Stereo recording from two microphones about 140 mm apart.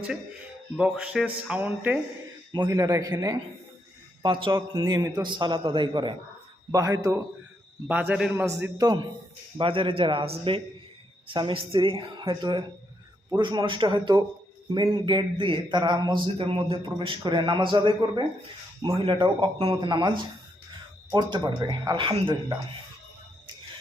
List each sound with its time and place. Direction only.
0.8 s speech: 5° right (ahead or behind)
2.6 s a man's voice: 20° right (ahead or behind)
6.7 s a man's voice: 25° right (ahead or behind)
7.9 s speech: 10° right (ahead or behind)
8.4 s a man's voice: 25° right (ahead or behind)
9.6 s a man's voice: 40° right (ahead or behind)